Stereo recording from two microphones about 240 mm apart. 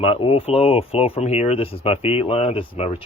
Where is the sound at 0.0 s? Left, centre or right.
Left.